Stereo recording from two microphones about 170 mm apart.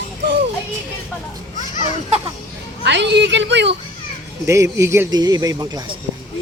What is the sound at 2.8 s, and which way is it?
Speech, 90° right.